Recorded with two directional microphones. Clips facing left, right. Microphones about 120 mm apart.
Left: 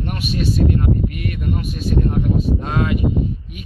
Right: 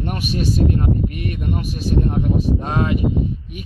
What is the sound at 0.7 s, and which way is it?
Speech, 35° right (ahead or behind).